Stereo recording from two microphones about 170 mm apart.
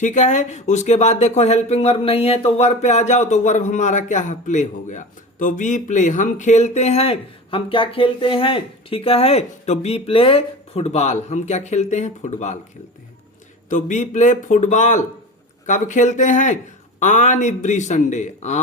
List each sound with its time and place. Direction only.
0.0 s speech: 45° left (ahead or behind)
13.7 s speech: 45° left (ahead or behind)